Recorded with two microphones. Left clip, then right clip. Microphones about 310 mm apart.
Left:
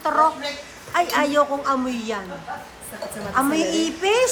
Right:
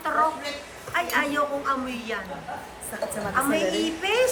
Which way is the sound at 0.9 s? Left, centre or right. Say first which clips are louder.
Left 5 dB; centre.